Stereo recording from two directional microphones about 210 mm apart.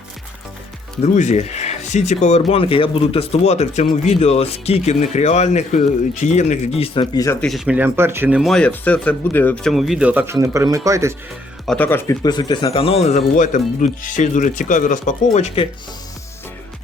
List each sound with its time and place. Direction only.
1.0 s speech: 35° left (ahead or behind); by 7.3 s 20° left (ahead or behind)
7.4 s speech: centre (ahead or behind)
11.6 s speech: 5° left (ahead or behind); by 15.6 s 35° left (ahead or behind)